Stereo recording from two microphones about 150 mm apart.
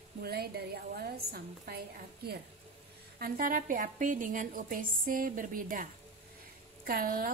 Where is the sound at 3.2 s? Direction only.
65° right (ahead or behind).